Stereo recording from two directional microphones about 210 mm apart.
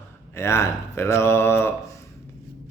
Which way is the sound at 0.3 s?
10° left (ahead or behind).